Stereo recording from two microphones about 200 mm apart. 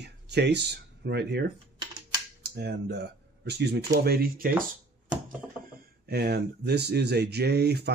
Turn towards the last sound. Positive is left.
turn(degrees=-55)  # may be behind; listen again after turning